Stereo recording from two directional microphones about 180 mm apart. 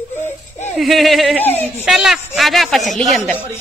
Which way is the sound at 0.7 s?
Centre (ahead or behind).